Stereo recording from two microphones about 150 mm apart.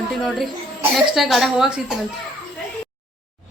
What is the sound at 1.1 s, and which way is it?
Speech, centre (ahead or behind).